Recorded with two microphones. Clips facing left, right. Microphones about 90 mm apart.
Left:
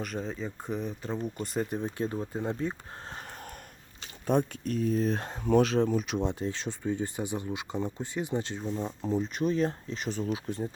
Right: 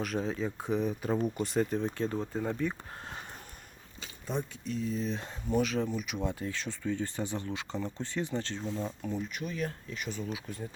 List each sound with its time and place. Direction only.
0.0 s speech: centre (ahead or behind)
1.7 s speech: 15° left (ahead or behind); by 3.2 s 35° left (ahead or behind)
4.3 s speech: 60° left (ahead or behind)
5.4 s speech: 65° left (ahead or behind)
5.6 s speech: 40° left (ahead or behind); by 8.6 s 15° left (ahead or behind)
8.8 s speech: 30° left (ahead or behind)